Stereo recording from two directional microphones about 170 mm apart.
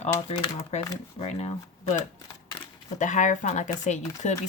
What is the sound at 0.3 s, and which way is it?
Speech, 35° left (ahead or behind).